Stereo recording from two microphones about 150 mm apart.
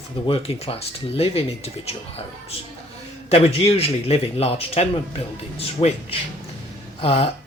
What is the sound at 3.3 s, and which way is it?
Speech, 40° left (ahead or behind).